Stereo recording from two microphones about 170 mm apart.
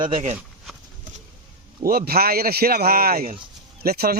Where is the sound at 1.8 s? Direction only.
65° right (ahead or behind).